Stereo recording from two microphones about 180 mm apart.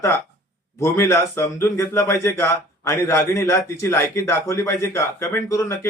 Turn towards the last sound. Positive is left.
turn(degrees=15)  # may be behind; listen again after turning